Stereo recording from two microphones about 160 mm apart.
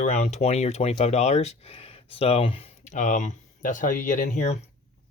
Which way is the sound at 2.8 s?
50° left (ahead or behind).